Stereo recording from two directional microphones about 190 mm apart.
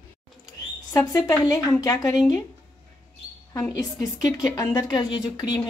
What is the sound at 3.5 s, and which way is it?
A woman's voice, 20° left (ahead or behind).